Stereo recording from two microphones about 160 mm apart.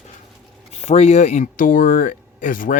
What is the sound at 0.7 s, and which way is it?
Speech, 40° left (ahead or behind).